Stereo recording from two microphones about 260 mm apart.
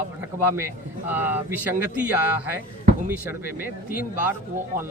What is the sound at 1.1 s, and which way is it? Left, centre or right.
Speech, centre.